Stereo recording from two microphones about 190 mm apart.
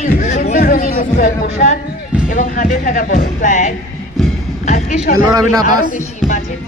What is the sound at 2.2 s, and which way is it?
A woman's voice, 45° left (ahead or behind).